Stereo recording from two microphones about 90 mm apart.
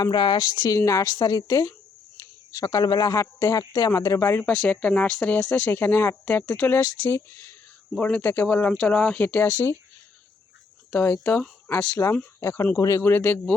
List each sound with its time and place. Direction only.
0.0 s speech: 55° left (ahead or behind)
0.9 s speech: 35° left (ahead or behind)
1.1 s a woman's voice: 45° left (ahead or behind); by 4.4 s 30° left (ahead or behind)
4.7 s speech: 15° left (ahead or behind)
9.5 s speech: 35° left (ahead or behind)
10.9 s speech: 25° left (ahead or behind)
13.0 s speech: 25° left (ahead or behind)